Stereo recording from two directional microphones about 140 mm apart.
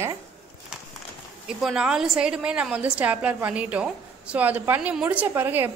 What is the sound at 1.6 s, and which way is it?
A woman's voice, 5° right (ahead or behind).